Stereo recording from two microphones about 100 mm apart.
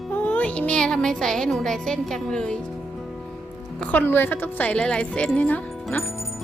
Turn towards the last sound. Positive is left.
turn(degrees=15)  # may be behind; listen again after turning